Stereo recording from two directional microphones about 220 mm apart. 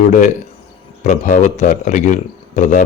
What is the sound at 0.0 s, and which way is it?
Speech, 35° left (ahead or behind).